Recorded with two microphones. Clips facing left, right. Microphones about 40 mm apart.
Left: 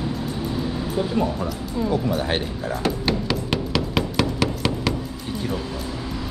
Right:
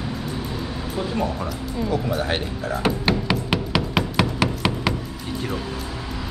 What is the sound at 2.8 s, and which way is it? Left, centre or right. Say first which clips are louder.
Music: right 2 dB; centre.